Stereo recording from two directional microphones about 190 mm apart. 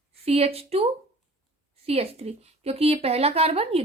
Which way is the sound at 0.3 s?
30° right (ahead or behind).